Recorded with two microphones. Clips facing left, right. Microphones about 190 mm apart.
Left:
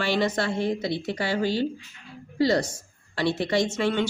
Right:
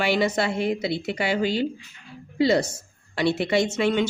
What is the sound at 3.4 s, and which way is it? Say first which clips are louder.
Speech: right 2 dB; 15° right (ahead or behind).